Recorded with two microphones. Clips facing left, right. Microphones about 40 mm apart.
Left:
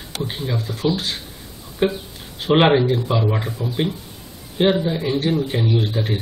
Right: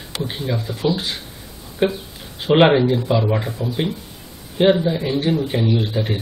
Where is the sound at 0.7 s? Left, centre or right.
Right.